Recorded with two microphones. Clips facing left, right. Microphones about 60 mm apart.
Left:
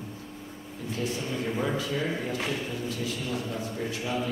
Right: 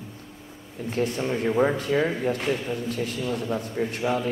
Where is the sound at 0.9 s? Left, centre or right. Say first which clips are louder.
Right 6 dB; right.